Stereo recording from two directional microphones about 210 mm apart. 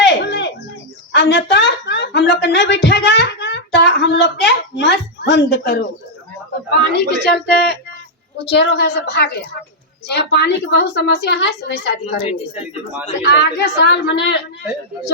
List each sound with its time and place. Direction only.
0.0 s a sound: 55° left (ahead or behind)
1.1 s a woman's voice: 55° left (ahead or behind)
13.2 s a woman's voice: 55° left (ahead or behind)